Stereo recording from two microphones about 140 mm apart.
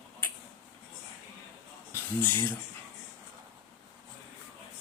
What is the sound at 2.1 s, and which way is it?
Speech, 15° left (ahead or behind).